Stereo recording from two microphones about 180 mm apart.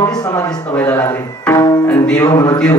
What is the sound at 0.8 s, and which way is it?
Speech, 10° left (ahead or behind).